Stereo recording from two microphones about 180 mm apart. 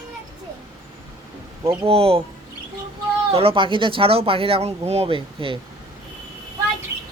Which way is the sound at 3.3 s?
30° right (ahead or behind).